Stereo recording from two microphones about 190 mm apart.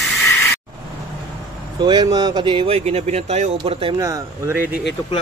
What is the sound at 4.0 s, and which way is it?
Speech, 15° right (ahead or behind).